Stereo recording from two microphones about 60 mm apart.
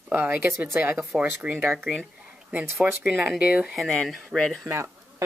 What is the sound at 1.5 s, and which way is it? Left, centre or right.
Speech, right.